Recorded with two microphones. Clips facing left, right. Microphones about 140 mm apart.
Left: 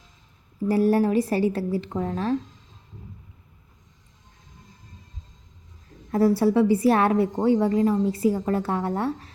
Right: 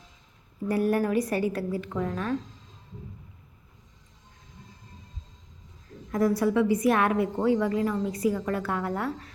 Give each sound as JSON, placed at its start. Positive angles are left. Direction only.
{"t": 0.7, "sound": "a woman's voice", "side_deg": 30}
{"t": 6.1, "sound": "a woman's voice", "side_deg": 30}